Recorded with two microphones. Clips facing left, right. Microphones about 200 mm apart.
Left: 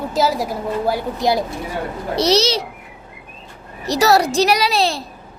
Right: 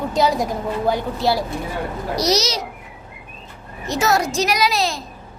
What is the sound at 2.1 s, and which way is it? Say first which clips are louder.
Speech: left 4 dB; 30° left (ahead or behind).